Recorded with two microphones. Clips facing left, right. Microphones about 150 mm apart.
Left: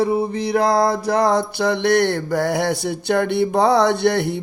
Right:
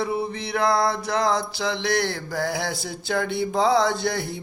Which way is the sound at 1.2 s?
60° left (ahead or behind).